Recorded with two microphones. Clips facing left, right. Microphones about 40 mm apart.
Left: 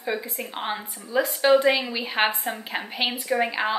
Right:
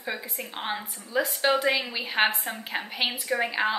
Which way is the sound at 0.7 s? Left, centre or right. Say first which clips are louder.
Left 2 dB; centre.